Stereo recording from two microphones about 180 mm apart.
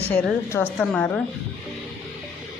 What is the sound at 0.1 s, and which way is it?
Speech, 10° left (ahead or behind).